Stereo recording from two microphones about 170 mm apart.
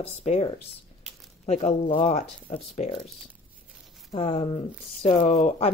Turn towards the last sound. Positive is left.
turn(degrees=40)  # may be behind; listen again after turning